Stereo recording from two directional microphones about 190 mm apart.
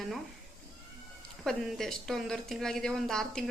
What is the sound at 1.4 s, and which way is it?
A woman's voice, centre (ahead or behind).